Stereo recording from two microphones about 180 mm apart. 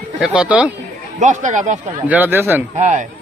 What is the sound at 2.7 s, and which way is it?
Speech, 40° right (ahead or behind).